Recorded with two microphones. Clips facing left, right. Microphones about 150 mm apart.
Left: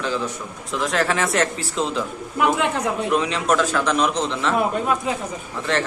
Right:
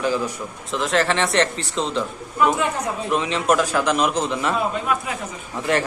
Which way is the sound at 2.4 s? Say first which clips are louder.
Even; 70° left (ahead or behind).